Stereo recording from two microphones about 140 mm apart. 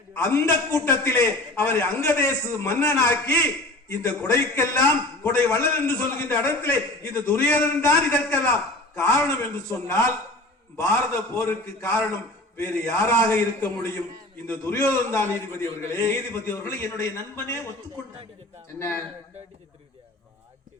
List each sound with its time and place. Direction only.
0.2 s a man's voice: 20° left (ahead or behind)
11.3 s a man's voice: 20° left (ahead or behind)
18.8 s a man's voice: 15° left (ahead or behind)